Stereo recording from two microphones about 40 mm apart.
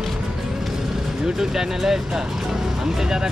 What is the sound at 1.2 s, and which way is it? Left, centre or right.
Speech, centre.